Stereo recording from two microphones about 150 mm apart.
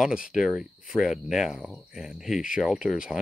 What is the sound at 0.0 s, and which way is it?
Speech, 5° right (ahead or behind).